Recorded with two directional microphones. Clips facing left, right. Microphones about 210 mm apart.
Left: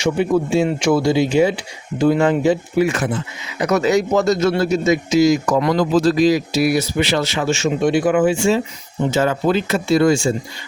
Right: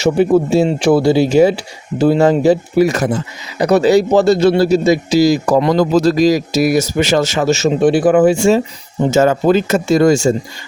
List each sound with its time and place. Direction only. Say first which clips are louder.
0.0 s speech: right 5 dB; 35° right (ahead or behind)
5.8 s speech: right 3 dB; 40° right (ahead or behind)